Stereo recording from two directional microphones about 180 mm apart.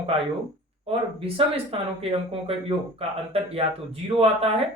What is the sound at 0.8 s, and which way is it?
Speech, 30° right (ahead or behind).